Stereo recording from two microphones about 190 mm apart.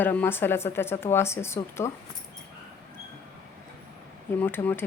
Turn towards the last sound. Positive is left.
turn(degrees=10)  # may be behind; listen again after turning